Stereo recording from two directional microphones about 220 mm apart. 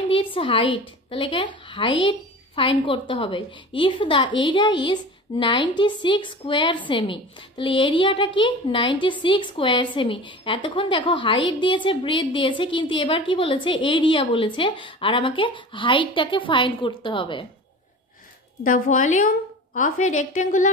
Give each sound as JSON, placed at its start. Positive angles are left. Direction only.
{"t": 0.1, "sound": "a woman's voice", "side_deg": 25}
{"t": 18.6, "sound": "a woman's voice", "side_deg": 35}